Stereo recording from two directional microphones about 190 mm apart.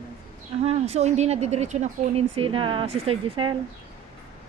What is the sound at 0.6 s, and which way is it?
Speech, 35° right (ahead or behind).